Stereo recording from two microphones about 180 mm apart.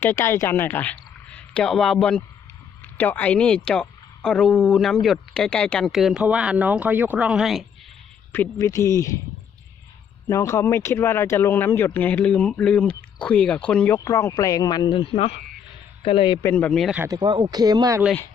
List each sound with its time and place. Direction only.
0.0 s speech: 10° left (ahead or behind)
8.3 s speech: 15° left (ahead or behind)
10.2 s speech: 15° left (ahead or behind)
16.5 s speech: 10° left (ahead or behind)
17.0 s speech: 20° right (ahead or behind)